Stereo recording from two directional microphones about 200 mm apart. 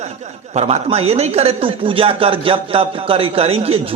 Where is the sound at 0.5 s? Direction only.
30° right (ahead or behind).